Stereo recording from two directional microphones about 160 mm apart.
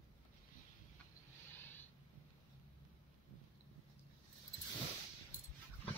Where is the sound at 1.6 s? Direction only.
10° left (ahead or behind).